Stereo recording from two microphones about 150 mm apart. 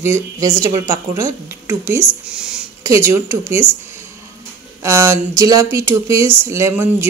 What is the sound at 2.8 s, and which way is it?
Speech, 20° right (ahead or behind).